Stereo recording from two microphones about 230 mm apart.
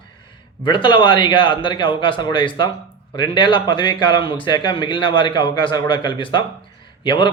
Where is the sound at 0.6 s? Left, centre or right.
Left.